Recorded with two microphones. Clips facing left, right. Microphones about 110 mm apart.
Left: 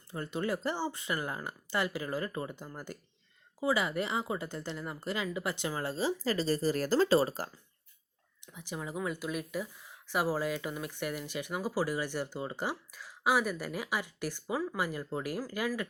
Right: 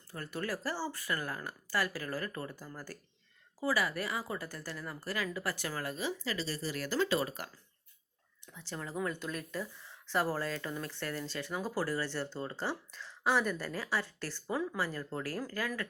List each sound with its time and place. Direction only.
0.1 s speech: 20° left (ahead or behind)
8.4 s speech: 15° left (ahead or behind)